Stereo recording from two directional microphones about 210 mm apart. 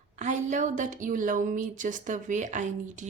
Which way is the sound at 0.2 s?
35° right (ahead or behind).